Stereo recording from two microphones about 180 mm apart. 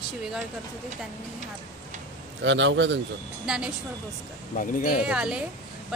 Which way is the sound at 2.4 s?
90° right.